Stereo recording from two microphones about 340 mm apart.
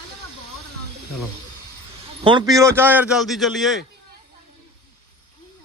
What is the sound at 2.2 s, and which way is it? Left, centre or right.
A man's voice, centre.